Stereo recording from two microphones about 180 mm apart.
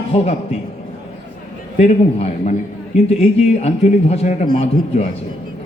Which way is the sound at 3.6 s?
35° left (ahead or behind).